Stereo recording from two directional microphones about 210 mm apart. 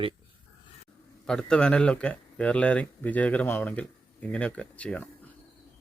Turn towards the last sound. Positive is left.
turn(degrees=5)  # may be behind; listen again after turning